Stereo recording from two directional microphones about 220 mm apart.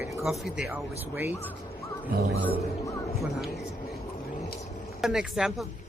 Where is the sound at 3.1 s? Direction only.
Centre (ahead or behind).